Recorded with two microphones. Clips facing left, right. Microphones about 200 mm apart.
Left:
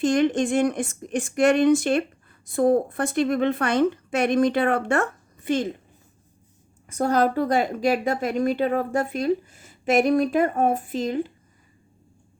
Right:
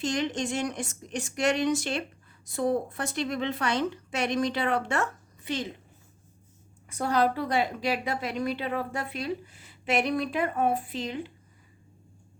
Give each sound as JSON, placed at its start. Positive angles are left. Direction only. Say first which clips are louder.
{"t": 0.0, "sound": "a woman's voice", "louder": "left 9 dB", "side_deg": 55}
{"t": 6.8, "sound": "a woman's voice", "louder": "left 4 dB", "side_deg": 45}